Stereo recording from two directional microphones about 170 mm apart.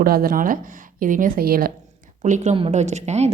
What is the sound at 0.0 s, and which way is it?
A woman's voice, 60° right (ahead or behind).